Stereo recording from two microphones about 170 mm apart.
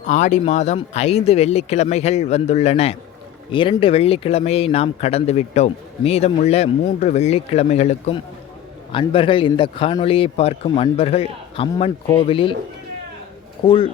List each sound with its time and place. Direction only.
0.1 s speech: 45° left (ahead or behind)
13.7 s speech: 30° left (ahead or behind)